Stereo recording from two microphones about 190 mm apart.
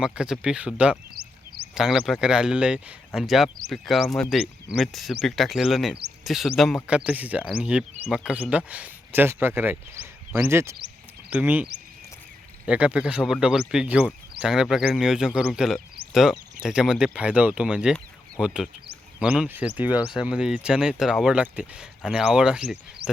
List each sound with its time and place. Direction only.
0.0 s speech: 5° right (ahead or behind)
1.1 s a sound: 55° right (ahead or behind)
1.7 s speech: centre (ahead or behind)